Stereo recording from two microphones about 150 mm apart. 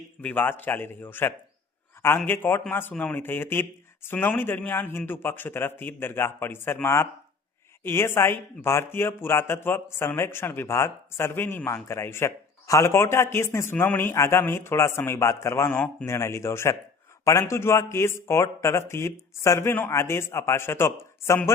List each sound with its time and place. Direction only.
0.2 s speech: 10° left (ahead or behind)